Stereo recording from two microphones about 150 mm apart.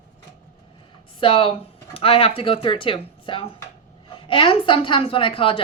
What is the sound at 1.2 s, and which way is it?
A woman's voice, 35° left (ahead or behind).